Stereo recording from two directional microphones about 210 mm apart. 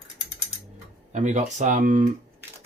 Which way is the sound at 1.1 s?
35° right (ahead or behind).